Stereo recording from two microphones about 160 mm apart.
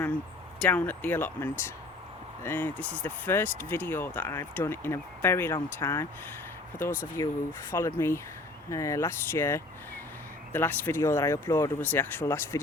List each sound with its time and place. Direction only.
0.6 s speech: 10° left (ahead or behind)